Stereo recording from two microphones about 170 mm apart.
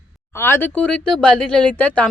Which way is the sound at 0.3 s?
15° left (ahead or behind).